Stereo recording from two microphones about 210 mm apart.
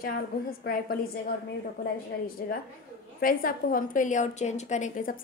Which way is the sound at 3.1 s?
40° left (ahead or behind).